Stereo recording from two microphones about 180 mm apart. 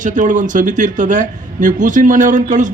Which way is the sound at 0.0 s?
45° right (ahead or behind).